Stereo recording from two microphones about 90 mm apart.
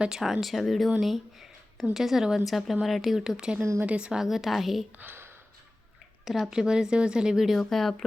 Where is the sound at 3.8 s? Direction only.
15° right (ahead or behind).